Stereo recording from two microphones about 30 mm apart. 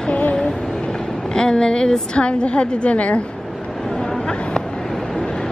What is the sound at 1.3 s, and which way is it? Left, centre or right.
Speech, left.